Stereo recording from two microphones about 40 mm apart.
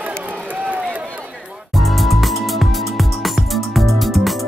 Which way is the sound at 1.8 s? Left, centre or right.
Centre.